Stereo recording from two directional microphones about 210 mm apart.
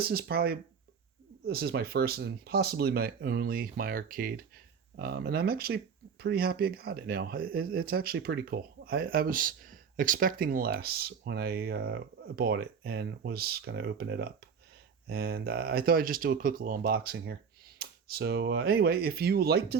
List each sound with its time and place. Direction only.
0.0 s speech: 45° right (ahead or behind)